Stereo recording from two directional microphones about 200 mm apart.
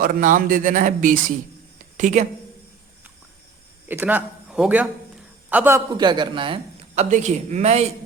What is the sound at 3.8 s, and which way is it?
A man's voice, 10° right (ahead or behind).